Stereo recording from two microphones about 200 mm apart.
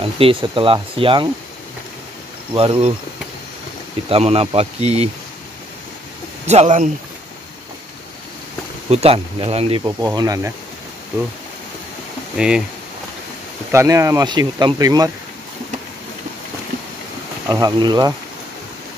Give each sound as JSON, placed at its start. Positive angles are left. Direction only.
{"t": 0.0, "sound": "speech", "side_deg": -25}
{"t": 2.5, "sound": "speech", "side_deg": -25}
{"t": 4.1, "sound": "speech", "side_deg": -30}
{"t": 6.4, "sound": "speech", "side_deg": -35}
{"t": 8.9, "sound": "speech", "side_deg": -30}
{"t": 9.8, "sound": "speech", "side_deg": -20}
{"t": 12.4, "sound": "speech", "side_deg": -5}
{"t": 13.7, "sound": "speech", "side_deg": -15}
{"t": 17.5, "sound": "speech", "side_deg": -20}